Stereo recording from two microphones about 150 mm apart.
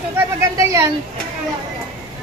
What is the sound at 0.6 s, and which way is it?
Speech, 20° right (ahead or behind).